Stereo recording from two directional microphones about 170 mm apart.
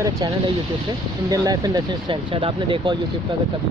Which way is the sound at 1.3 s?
20° right (ahead or behind).